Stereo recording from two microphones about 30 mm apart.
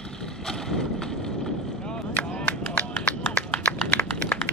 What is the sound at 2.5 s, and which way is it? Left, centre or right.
Music, left.